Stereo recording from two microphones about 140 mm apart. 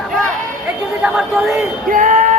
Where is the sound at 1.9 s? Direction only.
70° right (ahead or behind).